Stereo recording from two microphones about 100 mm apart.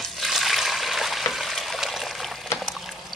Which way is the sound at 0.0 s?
Centre (ahead or behind).